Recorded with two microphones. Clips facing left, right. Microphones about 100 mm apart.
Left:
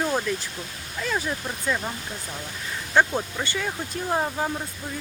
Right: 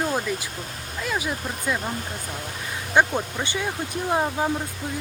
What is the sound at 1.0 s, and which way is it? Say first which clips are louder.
Speech: even; 5° right (ahead or behind).